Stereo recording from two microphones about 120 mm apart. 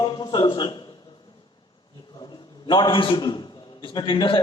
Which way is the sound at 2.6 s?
40° left (ahead or behind).